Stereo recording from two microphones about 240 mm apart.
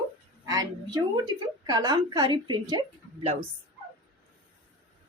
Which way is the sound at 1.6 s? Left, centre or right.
Centre.